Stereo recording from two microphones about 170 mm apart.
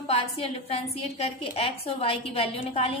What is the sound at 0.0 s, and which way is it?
A woman's voice, 35° left (ahead or behind).